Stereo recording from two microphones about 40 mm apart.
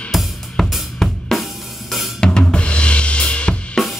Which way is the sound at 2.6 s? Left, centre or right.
Left.